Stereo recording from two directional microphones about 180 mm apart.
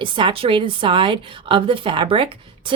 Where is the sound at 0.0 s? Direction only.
25° right (ahead or behind).